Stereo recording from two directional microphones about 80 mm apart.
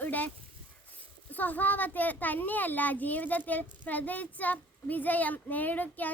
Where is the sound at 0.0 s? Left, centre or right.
Left.